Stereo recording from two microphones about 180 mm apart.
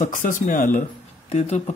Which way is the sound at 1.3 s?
35° left (ahead or behind).